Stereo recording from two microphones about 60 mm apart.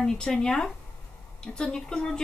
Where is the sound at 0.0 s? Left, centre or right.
Centre.